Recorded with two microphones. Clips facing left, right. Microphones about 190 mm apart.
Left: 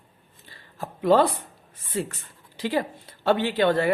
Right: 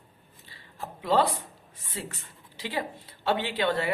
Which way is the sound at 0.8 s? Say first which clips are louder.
Left 5 dB; 50° left (ahead or behind).